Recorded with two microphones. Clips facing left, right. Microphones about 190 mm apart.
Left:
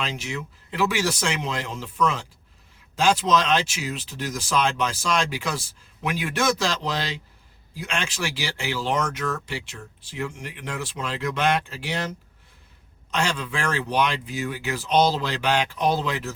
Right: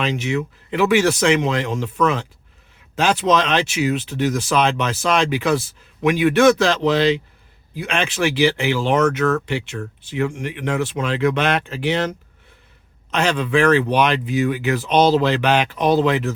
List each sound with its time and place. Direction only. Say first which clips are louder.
0.0 s speech: right 9 dB; 65° right (ahead or behind)
13.1 s speech: right 7 dB; 65° right (ahead or behind)